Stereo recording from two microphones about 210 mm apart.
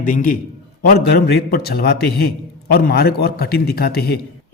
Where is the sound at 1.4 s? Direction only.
50° left (ahead or behind).